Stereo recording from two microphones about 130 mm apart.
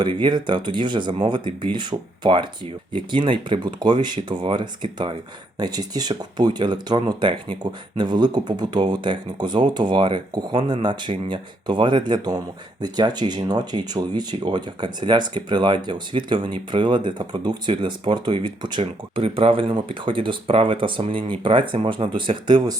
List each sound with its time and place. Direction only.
0.0 s speech: 35° right (ahead or behind)